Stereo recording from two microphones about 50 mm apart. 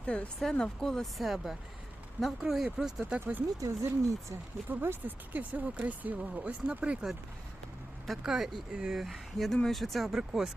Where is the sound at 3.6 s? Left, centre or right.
Right.